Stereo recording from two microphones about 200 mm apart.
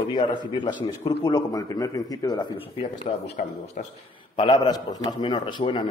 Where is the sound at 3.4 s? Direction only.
45° left (ahead or behind).